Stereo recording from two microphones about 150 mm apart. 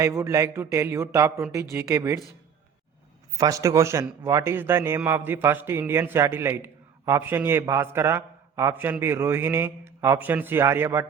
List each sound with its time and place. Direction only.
0.0 s speech: 20° right (ahead or behind)
3.3 s a man's voice: 20° right (ahead or behind)